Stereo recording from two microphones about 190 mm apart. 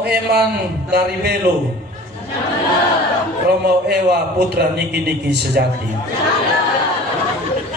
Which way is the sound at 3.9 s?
55° right (ahead or behind).